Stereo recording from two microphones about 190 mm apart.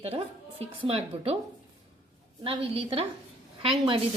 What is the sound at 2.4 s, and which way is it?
A woman's voice, 30° right (ahead or behind).